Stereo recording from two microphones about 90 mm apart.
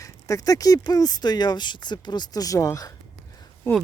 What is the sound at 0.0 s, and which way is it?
Speech, 40° left (ahead or behind).